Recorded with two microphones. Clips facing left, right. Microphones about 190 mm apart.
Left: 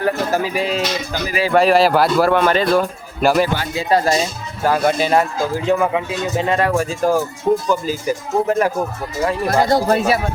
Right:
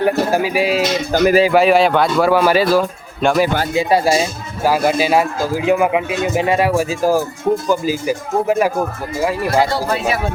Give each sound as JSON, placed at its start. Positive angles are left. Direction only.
{"t": 0.0, "sound": "a man's voice", "side_deg": -10}
{"t": 1.1, "sound": "speech", "side_deg": -45}
{"t": 1.5, "sound": "speech", "side_deg": 0}
{"t": 3.8, "sound": "a man's voice", "side_deg": -10}
{"t": 9.6, "sound": "speech", "side_deg": 45}